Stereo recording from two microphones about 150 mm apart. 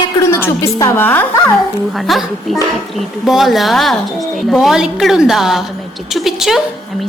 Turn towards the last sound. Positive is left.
turn(degrees=0)  # may be behind; listen again after turning